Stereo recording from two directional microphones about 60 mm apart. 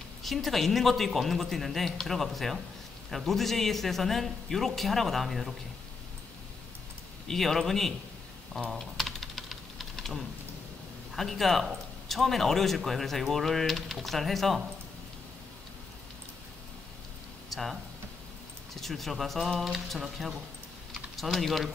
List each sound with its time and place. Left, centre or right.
0.2 s speech: centre
7.2 s speech: centre
8.6 s typing: centre
11.1 s speech: centre
17.5 s a sound: centre
18.8 s speech: centre
20.9 s typing: centre